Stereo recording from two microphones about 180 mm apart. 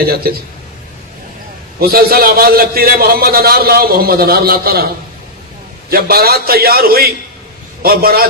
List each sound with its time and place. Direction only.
1.8 s a man's voice: 55° right (ahead or behind)
5.9 s a man's voice: 55° right (ahead or behind)